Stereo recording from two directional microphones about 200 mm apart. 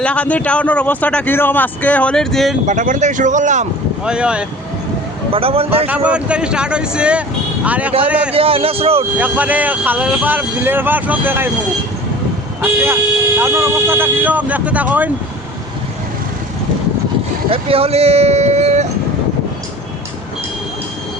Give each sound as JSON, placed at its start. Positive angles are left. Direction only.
{"t": 0.0, "sound": "a man's voice", "side_deg": 5}
{"t": 2.6, "sound": "speech", "side_deg": -40}
{"t": 4.0, "sound": "speech", "side_deg": -5}
{"t": 5.3, "sound": "speech", "side_deg": -30}
{"t": 5.9, "sound": "speech", "side_deg": -5}
{"t": 8.4, "sound": "speech", "side_deg": -30}
{"t": 9.1, "sound": "speech", "side_deg": -5}
{"t": 12.6, "sound": "speech", "side_deg": -10}
{"t": 17.5, "sound": "speech", "side_deg": -30}